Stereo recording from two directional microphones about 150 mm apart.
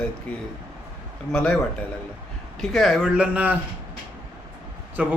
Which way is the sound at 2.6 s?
Centre (ahead or behind).